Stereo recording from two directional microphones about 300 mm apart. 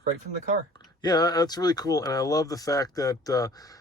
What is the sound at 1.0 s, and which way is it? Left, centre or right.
Speech, centre.